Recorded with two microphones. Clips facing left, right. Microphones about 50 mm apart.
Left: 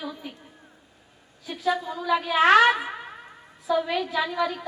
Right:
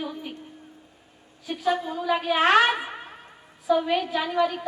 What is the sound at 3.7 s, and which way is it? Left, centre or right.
Speech, centre.